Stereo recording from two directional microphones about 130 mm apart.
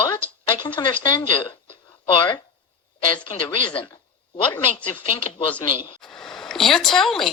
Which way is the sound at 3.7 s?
40° left (ahead or behind).